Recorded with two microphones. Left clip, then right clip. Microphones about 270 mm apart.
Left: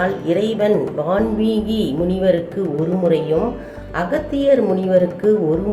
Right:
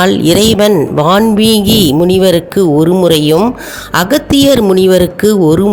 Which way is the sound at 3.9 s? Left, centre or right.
Right.